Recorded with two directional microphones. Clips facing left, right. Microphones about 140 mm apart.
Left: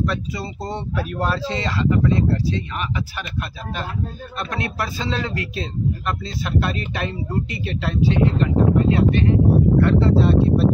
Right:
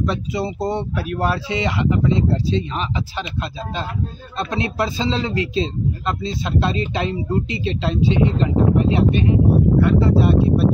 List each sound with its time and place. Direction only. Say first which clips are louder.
0.0 s speech: right 3 dB; 20° right (ahead or behind)
4.4 s speech: right 5 dB; 25° right (ahead or behind)